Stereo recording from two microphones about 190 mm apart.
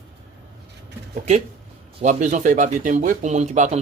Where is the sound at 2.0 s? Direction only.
40° right (ahead or behind).